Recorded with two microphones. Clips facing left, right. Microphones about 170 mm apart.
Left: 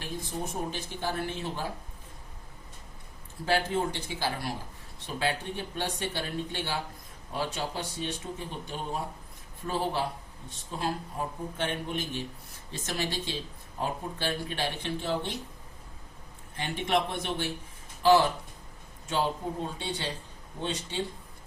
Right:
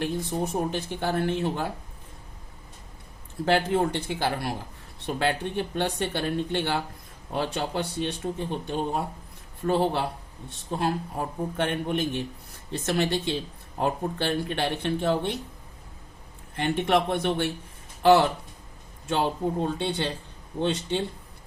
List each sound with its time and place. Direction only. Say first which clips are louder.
0.0 s speech: right 8 dB; 60° right (ahead or behind)
3.4 s speech: right 5 dB; 60° right (ahead or behind)
16.6 s speech: right 5 dB; 60° right (ahead or behind)